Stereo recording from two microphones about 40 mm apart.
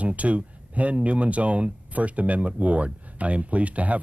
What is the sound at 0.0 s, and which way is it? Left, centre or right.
Speech, right.